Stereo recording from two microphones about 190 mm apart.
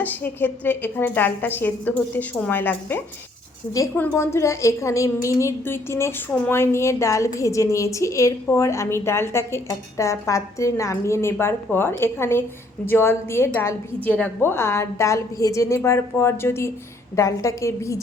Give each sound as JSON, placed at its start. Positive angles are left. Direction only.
{"t": 0.0, "sound": "a woman's voice", "side_deg": 10}